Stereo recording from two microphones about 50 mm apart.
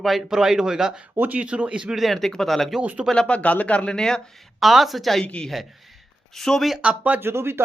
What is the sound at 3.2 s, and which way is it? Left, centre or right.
Speech, left.